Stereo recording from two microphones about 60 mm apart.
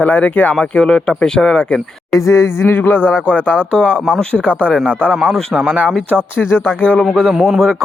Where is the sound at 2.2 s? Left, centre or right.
Left.